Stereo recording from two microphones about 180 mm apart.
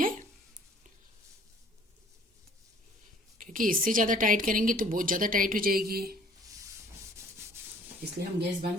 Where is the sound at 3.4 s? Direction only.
50° right (ahead or behind).